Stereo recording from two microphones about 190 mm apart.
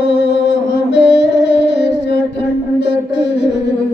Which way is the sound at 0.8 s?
65° left (ahead or behind).